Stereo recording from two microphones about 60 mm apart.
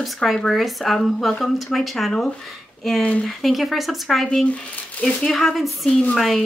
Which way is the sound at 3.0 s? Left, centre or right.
Left.